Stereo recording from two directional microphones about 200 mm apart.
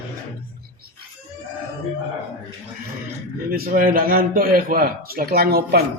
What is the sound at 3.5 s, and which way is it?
A man's voice, 45° right (ahead or behind).